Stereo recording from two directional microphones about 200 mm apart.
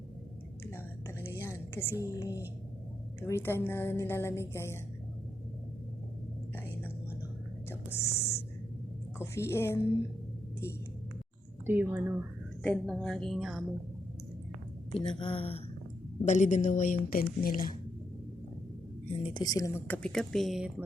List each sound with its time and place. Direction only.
1.4 s music: 10° left (ahead or behind)
3.2 s speech: 15° left (ahead or behind)
7.7 s speech: 10° left (ahead or behind)
11.6 s speech: 10° right (ahead or behind)
12.6 s a woman's voice: 5° left (ahead or behind)
14.9 s a woman's voice: 25° left (ahead or behind); by 17.7 s 45° left (ahead or behind)
19.2 s speech: 20° left (ahead or behind); by 20.8 s centre (ahead or behind)